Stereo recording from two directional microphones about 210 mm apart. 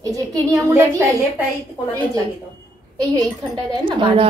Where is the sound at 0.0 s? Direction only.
15° right (ahead or behind).